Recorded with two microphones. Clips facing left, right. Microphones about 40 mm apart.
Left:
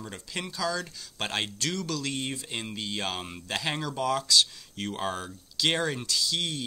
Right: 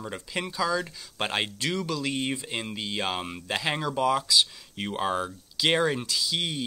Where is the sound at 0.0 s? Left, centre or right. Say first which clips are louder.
Right 4 dB; centre.